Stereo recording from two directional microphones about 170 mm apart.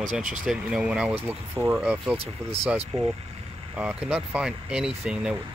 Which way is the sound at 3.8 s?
5° right (ahead or behind).